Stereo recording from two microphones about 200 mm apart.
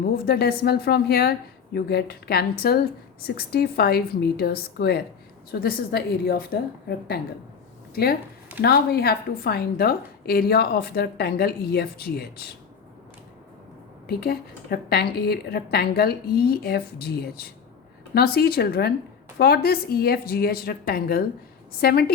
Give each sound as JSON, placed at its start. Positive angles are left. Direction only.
{"t": 0.0, "sound": "a woman's voice", "side_deg": 50}
{"t": 14.1, "sound": "a woman's voice", "side_deg": 50}